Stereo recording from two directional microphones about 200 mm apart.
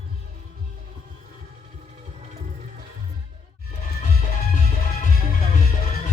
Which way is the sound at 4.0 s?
30° left (ahead or behind).